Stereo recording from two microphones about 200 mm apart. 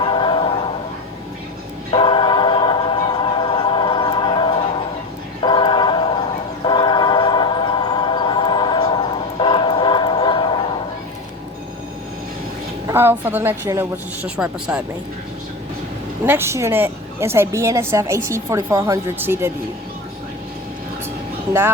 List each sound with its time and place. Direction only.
0.0 s choir: 25° left (ahead or behind)
1.9 s music: 25° left (ahead or behind)
5.4 s choir: 25° left (ahead or behind)
6.7 s music: 20° left (ahead or behind)
12.9 s a woman's voice: 10° right (ahead or behind)
16.2 s a woman's voice: 10° right (ahead or behind)